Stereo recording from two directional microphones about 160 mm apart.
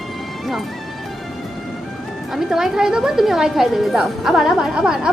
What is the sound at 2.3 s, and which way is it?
A woman's voice, centre (ahead or behind).